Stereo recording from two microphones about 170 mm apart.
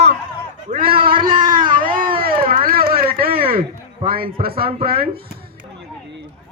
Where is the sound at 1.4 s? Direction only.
55° right (ahead or behind).